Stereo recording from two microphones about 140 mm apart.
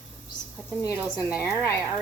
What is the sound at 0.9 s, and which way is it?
Speech, 10° right (ahead or behind).